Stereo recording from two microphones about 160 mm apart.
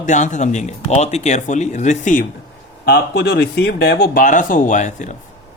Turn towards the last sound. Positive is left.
turn(degrees=50)  # may be behind; listen again after turning